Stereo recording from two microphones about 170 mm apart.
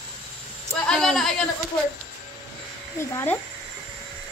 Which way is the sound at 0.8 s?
5° left (ahead or behind).